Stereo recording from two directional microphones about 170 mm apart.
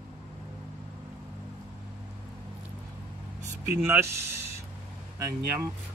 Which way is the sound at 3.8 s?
15° right (ahead or behind).